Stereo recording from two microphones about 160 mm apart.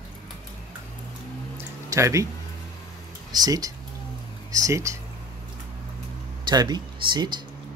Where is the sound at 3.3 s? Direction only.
25° right (ahead or behind).